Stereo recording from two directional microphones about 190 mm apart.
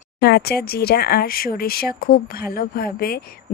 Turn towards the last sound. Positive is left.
turn(degrees=50)  # may be behind; listen again after turning